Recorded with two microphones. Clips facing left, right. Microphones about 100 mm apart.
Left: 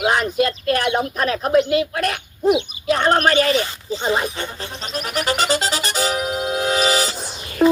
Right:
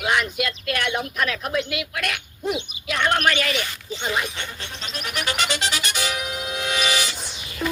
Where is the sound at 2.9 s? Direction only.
35° left (ahead or behind).